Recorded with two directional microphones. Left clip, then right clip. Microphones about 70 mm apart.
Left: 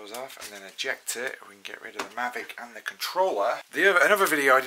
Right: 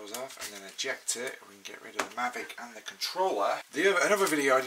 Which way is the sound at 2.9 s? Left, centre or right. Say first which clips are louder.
Left 4 dB; left.